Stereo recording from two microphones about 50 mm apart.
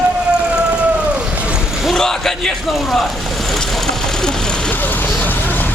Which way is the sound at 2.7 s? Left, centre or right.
Centre.